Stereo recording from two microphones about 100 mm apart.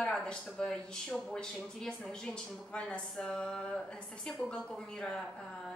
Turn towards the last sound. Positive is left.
turn(degrees=5)  # may be behind; listen again after turning